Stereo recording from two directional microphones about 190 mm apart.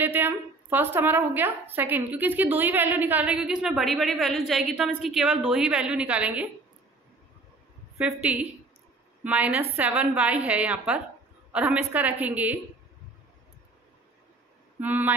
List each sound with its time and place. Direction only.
0.0 s a woman's voice: 10° right (ahead or behind)
9.2 s a woman's voice: 10° right (ahead or behind)
14.8 s a woman's voice: 10° right (ahead or behind)